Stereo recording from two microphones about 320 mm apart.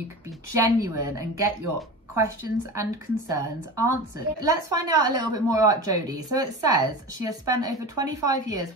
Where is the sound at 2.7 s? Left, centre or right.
Centre.